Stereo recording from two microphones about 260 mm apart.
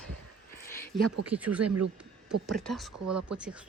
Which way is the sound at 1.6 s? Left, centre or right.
Right.